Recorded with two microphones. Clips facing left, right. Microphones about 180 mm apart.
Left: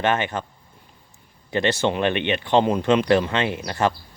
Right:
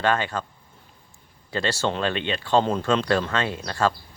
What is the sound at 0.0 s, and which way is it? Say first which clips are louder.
Speech: left 1 dB; 20° left (ahead or behind).